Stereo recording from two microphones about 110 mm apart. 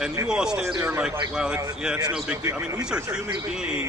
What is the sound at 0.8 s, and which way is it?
Speech, 20° right (ahead or behind).